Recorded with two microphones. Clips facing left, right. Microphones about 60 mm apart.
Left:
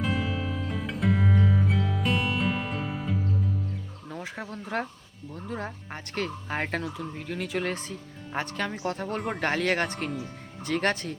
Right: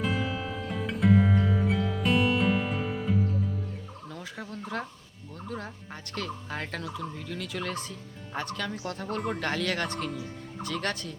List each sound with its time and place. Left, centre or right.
0.0 s music: centre
4.1 s fowl: left
4.7 s turkey: left
10.2 s speech: left
10.8 s turkey: left